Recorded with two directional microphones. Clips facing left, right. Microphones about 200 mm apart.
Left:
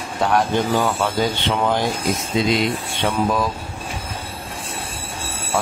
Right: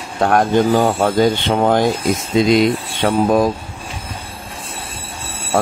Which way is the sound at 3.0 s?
50° right (ahead or behind).